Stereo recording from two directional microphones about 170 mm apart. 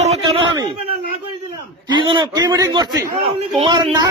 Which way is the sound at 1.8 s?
30° right (ahead or behind).